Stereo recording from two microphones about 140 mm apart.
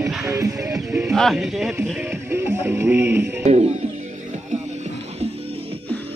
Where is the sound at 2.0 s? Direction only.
15° right (ahead or behind).